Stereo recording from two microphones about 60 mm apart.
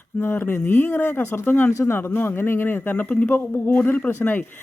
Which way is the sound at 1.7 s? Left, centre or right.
Left.